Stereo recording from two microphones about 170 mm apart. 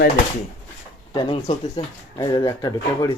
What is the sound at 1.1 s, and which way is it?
Speech, 35° left (ahead or behind).